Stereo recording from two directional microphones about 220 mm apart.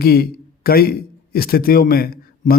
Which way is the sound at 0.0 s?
45° left (ahead or behind).